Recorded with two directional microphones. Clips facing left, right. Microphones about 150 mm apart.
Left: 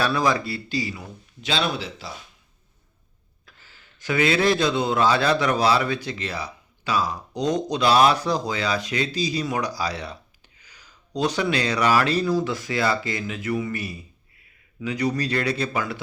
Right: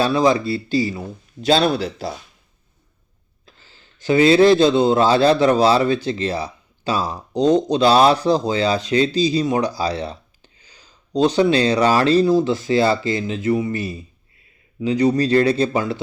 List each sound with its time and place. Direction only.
0.0 s speech: 25° right (ahead or behind); by 2.0 s 40° right (ahead or behind)
3.4 s a man's voice: 25° right (ahead or behind)